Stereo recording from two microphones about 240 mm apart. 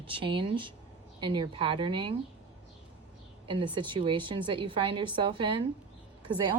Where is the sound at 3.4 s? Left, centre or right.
Right.